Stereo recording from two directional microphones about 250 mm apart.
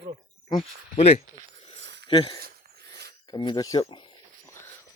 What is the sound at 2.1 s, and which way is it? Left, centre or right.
Speech, centre.